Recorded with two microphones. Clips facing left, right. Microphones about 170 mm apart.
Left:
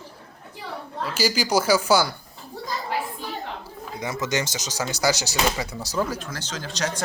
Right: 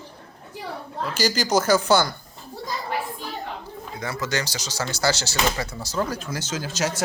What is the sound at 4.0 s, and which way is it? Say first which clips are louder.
Speech: left 1 dB; 20° left (ahead or behind).